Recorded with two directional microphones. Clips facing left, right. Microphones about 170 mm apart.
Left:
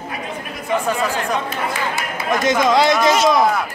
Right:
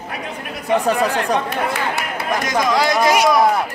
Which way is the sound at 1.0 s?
65° right (ahead or behind).